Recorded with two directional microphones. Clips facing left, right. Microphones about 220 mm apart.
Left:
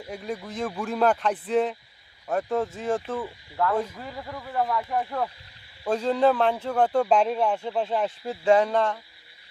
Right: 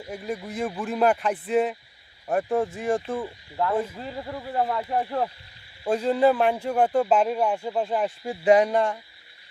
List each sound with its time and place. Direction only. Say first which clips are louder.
0.1 s speech: right 1 dB; 5° right (ahead or behind); by 5.3 s 30° right (ahead or behind)
5.9 s speech: right 1 dB; 10° right (ahead or behind)